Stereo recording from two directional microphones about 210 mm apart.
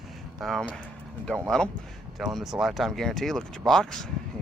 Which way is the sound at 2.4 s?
Centre (ahead or behind).